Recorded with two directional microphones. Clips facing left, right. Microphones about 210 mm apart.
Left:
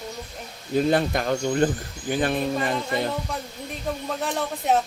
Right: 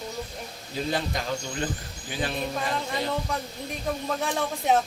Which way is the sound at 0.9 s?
55° left (ahead or behind).